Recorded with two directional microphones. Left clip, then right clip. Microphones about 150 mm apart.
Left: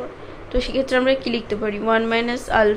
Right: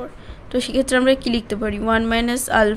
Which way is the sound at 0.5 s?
55° right (ahead or behind).